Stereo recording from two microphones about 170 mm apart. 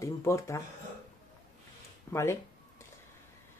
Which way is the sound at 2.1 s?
15° left (ahead or behind).